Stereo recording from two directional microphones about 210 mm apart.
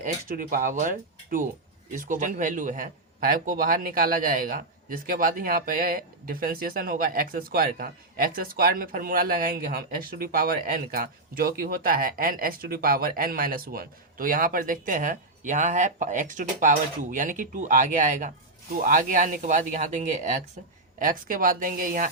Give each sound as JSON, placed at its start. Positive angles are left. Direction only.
{"t": 0.0, "sound": "speech", "side_deg": -40}